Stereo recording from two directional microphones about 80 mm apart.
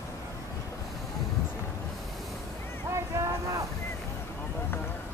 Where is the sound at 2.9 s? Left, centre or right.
Right.